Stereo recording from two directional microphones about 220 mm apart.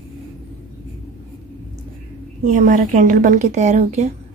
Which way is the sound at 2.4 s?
35° right (ahead or behind).